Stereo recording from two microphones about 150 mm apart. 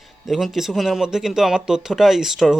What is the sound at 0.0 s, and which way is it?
Speech, centre (ahead or behind).